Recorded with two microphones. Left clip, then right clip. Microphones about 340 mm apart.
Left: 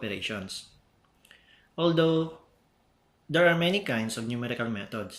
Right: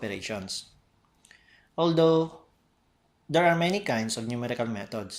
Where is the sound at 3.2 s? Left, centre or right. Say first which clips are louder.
Even; centre.